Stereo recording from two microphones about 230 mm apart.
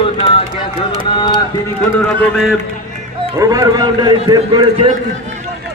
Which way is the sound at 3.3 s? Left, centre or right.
Centre.